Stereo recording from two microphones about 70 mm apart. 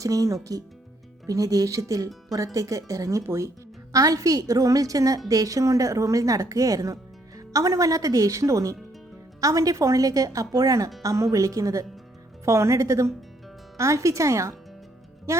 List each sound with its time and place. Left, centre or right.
0.0 s speech: right
3.2 s speech: right
3.9 s a woman's voice: right